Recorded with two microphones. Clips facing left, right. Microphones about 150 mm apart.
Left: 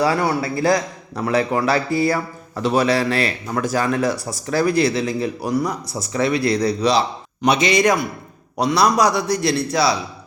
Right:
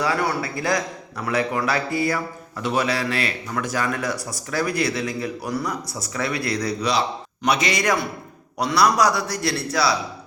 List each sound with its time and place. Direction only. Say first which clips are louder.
0.0 s a man's voice: left 4 dB; 30° left (ahead or behind)